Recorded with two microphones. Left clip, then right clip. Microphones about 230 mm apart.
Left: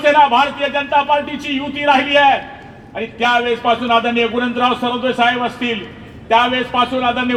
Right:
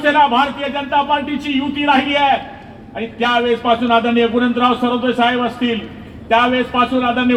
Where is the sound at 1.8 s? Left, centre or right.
Left.